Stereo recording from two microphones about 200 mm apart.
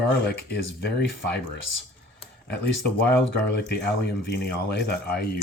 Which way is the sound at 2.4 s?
55° left (ahead or behind).